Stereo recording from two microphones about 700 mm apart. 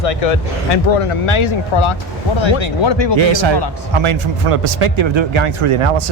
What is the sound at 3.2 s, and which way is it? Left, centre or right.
A man's voice, right.